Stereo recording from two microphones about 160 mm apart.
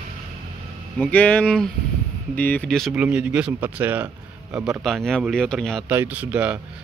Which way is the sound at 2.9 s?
10° right (ahead or behind).